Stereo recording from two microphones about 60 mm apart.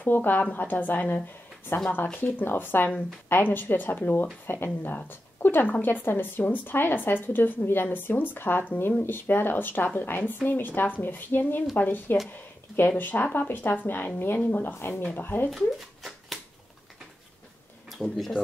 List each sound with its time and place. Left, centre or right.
0.0 s speech: left
15.5 s a sound: centre
18.1 s speech: centre